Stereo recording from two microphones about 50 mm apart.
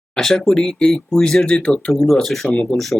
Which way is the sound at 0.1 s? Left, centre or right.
Centre.